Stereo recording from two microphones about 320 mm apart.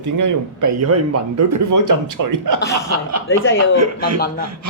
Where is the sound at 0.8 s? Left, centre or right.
Right.